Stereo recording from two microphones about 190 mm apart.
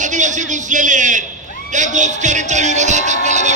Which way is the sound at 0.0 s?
40° right (ahead or behind).